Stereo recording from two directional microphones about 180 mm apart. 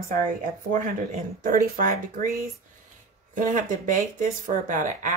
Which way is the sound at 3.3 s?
45° right (ahead or behind).